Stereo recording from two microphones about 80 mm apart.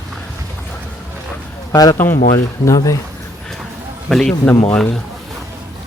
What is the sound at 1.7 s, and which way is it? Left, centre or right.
Speech, left.